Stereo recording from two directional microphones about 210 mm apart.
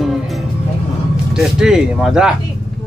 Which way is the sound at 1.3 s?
5° right (ahead or behind).